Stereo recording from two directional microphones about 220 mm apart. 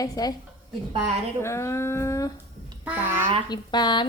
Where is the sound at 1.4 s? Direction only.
10° left (ahead or behind).